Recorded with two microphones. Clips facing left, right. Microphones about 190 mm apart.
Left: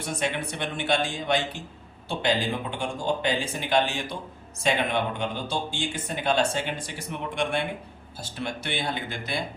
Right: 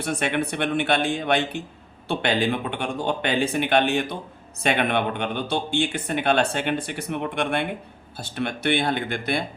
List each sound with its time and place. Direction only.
0.0 s speech: 60° right (ahead or behind)